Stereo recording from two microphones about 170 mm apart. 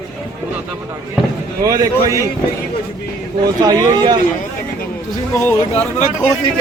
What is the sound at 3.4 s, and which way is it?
Speech, 20° right (ahead or behind).